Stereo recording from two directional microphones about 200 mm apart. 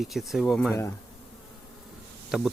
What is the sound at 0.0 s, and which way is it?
Speech, centre (ahead or behind).